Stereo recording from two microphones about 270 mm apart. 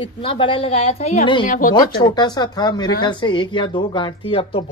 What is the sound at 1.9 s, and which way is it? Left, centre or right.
Speech, centre.